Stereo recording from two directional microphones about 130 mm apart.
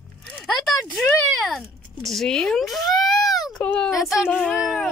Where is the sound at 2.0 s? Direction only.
5° left (ahead or behind).